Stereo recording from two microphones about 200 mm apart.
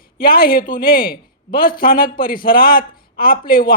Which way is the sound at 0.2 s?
50° left (ahead or behind).